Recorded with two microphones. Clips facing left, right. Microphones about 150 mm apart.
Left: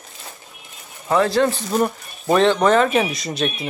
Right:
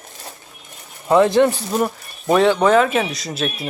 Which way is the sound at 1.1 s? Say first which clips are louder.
Right 4 dB; 20° right (ahead or behind).